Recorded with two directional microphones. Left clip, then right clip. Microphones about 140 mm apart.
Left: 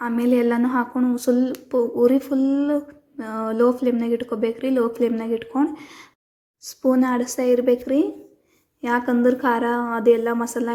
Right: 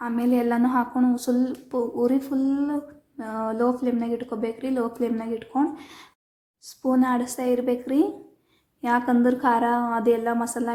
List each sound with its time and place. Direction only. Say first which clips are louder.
0.0 s a woman's voice: left 4 dB; 25° left (ahead or behind)